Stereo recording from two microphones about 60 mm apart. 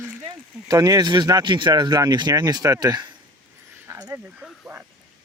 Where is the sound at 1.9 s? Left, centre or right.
Right.